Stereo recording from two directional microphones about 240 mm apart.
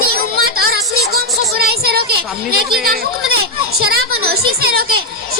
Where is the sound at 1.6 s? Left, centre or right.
Right.